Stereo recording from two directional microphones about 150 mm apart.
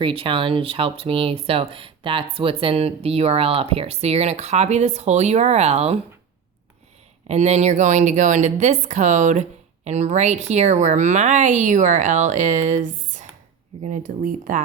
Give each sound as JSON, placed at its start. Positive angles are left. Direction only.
{"t": 0.0, "sound": "speech", "side_deg": -35}
{"t": 7.3, "sound": "a woman's voice", "side_deg": -50}